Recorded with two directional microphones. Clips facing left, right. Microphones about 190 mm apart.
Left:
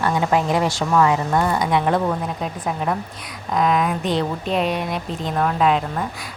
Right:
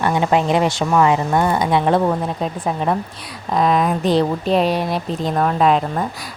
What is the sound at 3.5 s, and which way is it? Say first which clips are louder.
Speech: right 3 dB; 35° right (ahead or behind).